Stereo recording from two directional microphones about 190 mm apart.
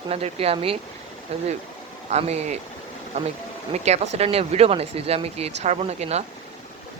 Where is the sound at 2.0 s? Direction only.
35° right (ahead or behind).